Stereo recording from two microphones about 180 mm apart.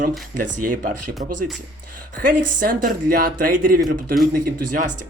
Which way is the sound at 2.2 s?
50° right (ahead or behind).